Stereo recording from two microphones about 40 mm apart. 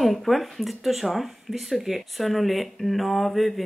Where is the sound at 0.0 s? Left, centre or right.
Centre.